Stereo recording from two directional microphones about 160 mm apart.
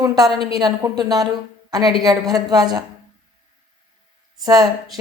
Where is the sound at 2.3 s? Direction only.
25° right (ahead or behind).